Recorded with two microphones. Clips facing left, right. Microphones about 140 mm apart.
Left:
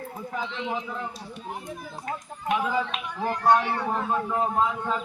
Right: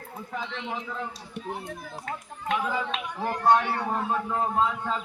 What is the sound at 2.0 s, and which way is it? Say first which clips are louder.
Speech: left 2 dB; 15° left (ahead or behind).